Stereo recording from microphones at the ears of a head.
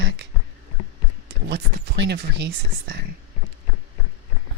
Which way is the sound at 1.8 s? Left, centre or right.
Right.